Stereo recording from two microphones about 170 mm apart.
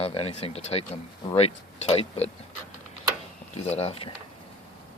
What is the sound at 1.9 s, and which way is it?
Speech, 35° left (ahead or behind).